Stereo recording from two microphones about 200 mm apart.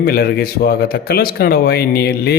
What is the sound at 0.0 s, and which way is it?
Speech, 50° left (ahead or behind).